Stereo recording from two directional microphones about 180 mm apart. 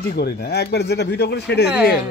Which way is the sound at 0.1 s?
60° left (ahead or behind).